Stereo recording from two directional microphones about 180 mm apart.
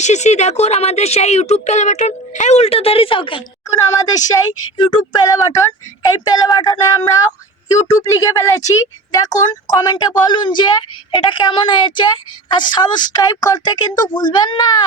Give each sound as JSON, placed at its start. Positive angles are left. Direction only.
{"t": 0.0, "sound": "speech", "side_deg": 40}
{"t": 3.7, "sound": "a woman's voice", "side_deg": 20}